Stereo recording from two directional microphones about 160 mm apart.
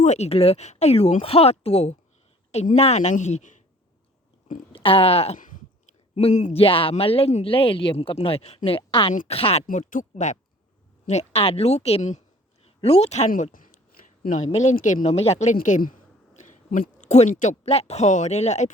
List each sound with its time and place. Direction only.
0.0 s a woman's voice: 45° left (ahead or behind)
4.7 s a woman's voice: 35° left (ahead or behind)
5.4 s a woman's voice: 55° left (ahead or behind); by 9.6 s 40° left (ahead or behind)
9.6 s a woman's voice: 50° left (ahead or behind)
15.5 s a sound: 55° left (ahead or behind)
17.3 s speech: 50° left (ahead or behind)